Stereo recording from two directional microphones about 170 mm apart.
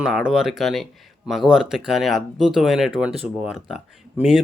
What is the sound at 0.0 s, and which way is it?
Speech, 5° right (ahead or behind).